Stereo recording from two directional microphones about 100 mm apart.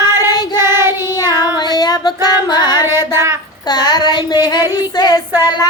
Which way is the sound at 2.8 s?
25° right (ahead or behind).